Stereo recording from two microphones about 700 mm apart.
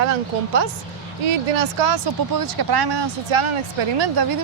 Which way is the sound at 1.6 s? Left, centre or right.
Right.